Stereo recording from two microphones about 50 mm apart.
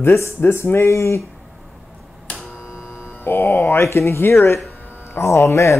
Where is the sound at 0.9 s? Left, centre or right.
Left.